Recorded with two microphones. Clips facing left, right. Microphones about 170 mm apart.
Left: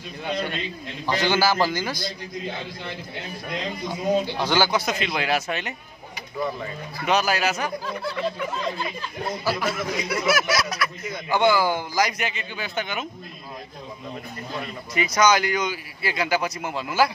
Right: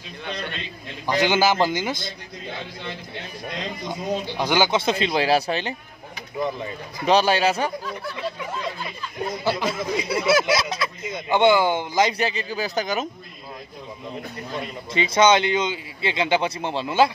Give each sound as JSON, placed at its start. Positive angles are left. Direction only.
{"t": 1.0, "sound": "speech", "side_deg": -15}
{"t": 3.9, "sound": "speech", "side_deg": -15}
{"t": 7.1, "sound": "speech", "side_deg": -30}
{"t": 9.4, "sound": "speech", "side_deg": -25}
{"t": 15.0, "sound": "speech", "side_deg": -25}